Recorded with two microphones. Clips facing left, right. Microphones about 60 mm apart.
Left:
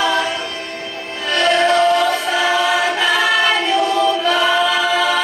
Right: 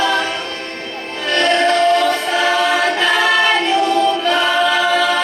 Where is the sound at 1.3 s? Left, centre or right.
Centre.